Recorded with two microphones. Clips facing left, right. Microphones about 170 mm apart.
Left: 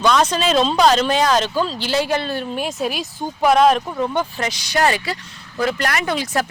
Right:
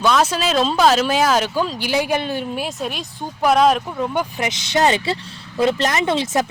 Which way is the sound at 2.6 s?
Centre (ahead or behind).